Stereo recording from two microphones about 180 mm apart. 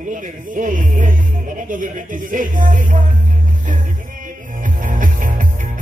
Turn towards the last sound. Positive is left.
turn(degrees=-50)  # may be behind; listen again after turning